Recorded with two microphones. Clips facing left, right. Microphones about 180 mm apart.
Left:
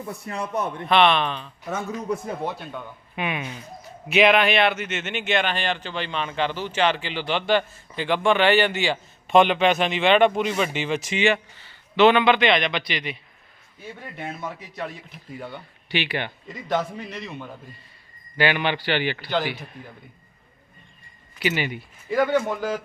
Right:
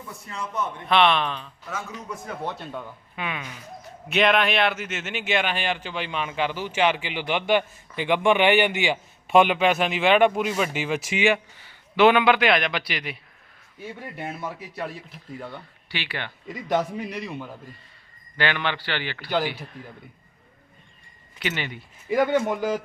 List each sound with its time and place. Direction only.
0.3 s a man's voice: 60° left (ahead or behind)
0.9 s speech: centre (ahead or behind)
1.6 s a man's voice: 35° left (ahead or behind)
2.4 s a man's voice: 10° left (ahead or behind)
4.1 s speech: 5° left (ahead or behind)
15.3 s speech: 5° left (ahead or behind)
15.9 s a man's voice: 15° left (ahead or behind)
16.5 s speech: 10° right (ahead or behind)
18.3 s a man's voice: 10° left (ahead or behind)
21.3 s a man's voice: 10° left (ahead or behind)
22.1 s speech: 20° right (ahead or behind)